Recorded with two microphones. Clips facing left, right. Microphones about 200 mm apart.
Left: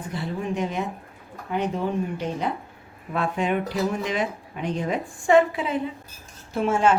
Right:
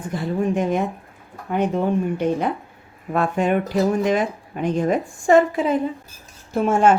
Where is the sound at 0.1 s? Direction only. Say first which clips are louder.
Right 7 dB; 50° right (ahead or behind).